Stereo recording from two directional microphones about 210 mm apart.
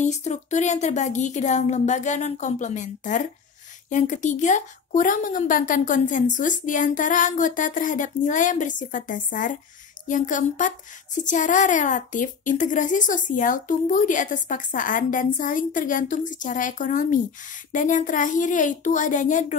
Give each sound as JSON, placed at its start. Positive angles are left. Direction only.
{"t": 0.0, "sound": "a woman's voice", "side_deg": 35}